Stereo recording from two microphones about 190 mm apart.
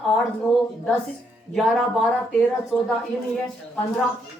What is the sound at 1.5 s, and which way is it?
Speech, centre (ahead or behind).